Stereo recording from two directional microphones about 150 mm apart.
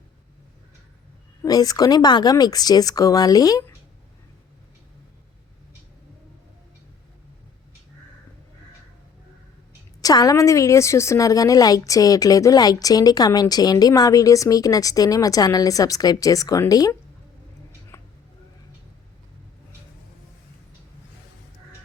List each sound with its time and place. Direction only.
1.4 s a woman's voice: 25° left (ahead or behind)
10.0 s a woman's voice: 25° left (ahead or behind)
17.9 s a sound: 15° left (ahead or behind)